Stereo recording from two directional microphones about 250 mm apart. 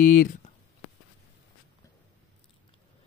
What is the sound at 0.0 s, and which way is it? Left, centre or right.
Speech, left.